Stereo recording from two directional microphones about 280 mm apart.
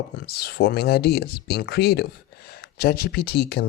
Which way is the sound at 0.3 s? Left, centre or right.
Left.